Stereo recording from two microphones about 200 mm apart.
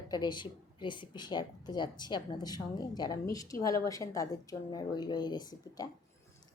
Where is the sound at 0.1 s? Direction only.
20° left (ahead or behind).